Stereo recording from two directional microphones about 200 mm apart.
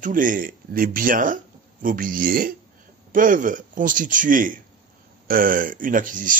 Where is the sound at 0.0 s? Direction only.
40° right (ahead or behind).